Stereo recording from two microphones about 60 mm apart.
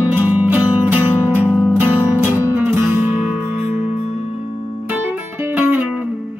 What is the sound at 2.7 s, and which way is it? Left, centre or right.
Music, right.